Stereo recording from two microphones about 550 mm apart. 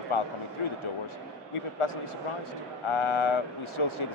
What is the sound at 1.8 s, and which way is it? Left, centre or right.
A man's voice, left.